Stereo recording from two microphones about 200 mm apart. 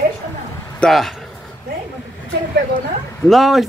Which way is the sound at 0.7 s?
Centre (ahead or behind).